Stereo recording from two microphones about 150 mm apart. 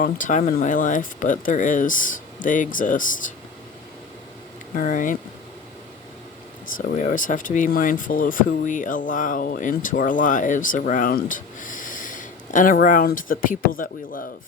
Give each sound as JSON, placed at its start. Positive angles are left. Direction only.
{"t": 0.0, "sound": "speech", "side_deg": 60}
{"t": 4.7, "sound": "speech", "side_deg": 60}
{"t": 6.7, "sound": "speech", "side_deg": 60}